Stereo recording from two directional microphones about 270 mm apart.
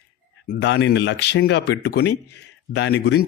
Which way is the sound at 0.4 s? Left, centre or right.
Left.